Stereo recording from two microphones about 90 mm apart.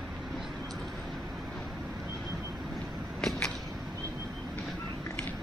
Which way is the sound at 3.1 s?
5° left (ahead or behind).